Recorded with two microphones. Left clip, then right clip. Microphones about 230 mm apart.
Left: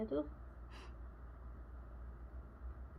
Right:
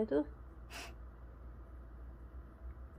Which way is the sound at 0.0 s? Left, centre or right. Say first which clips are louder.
Right 6 dB; right.